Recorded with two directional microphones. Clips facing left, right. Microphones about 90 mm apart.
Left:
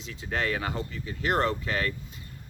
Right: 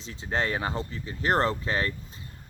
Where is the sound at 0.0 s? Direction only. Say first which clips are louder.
Right 1 dB; 30° right (ahead or behind).